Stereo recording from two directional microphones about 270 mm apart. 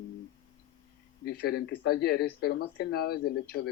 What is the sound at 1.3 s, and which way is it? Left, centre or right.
Speech, left.